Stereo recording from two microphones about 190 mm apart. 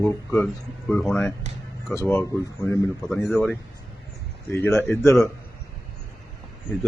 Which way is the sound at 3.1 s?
Centre (ahead or behind).